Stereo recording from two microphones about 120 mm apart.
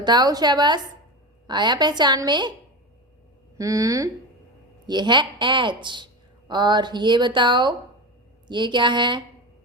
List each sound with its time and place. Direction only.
0.0 s speech: 35° right (ahead or behind)
3.6 s speech: 25° right (ahead or behind)
4.9 s speech: 40° right (ahead or behind)